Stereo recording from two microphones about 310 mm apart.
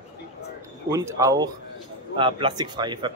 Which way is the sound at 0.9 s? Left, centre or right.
Centre.